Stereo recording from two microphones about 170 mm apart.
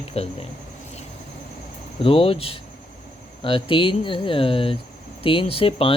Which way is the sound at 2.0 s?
30° left (ahead or behind).